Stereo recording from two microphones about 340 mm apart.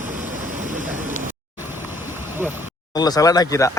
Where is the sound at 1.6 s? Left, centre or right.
Centre.